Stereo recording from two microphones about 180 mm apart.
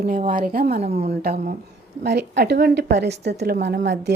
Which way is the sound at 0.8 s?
35° right (ahead or behind).